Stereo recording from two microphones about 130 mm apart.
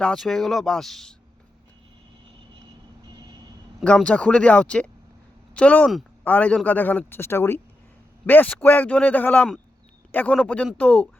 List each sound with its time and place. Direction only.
0.0 s speech: 5° left (ahead or behind)
3.1 s vehicle: 35° right (ahead or behind)
3.8 s a man's voice: 10° left (ahead or behind)